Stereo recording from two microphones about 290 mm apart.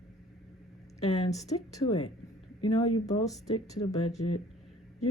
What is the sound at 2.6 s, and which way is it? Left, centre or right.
Speech, left.